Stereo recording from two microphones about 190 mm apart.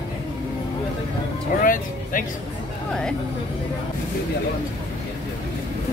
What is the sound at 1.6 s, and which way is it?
Speech, 45° left (ahead or behind).